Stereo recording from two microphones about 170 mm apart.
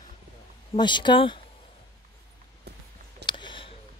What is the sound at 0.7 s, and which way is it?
Speech, 25° left (ahead or behind).